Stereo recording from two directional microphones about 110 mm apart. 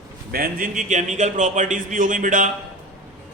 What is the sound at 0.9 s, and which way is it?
Speech, 90° right.